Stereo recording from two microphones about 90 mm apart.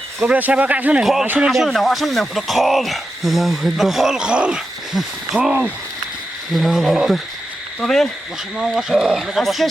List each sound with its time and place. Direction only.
0.3 s speech: 15° right (ahead or behind)
1.0 s speech: 5° right (ahead or behind)
6.5 s speech: centre (ahead or behind)